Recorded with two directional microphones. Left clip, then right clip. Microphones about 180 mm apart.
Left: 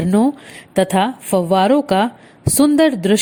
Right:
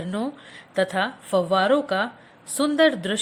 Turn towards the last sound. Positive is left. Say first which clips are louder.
# left 6 dB
turn(degrees=40)  # may be behind; listen again after turning